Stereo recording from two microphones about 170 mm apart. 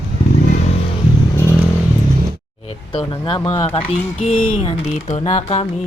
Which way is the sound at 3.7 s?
35° left (ahead or behind).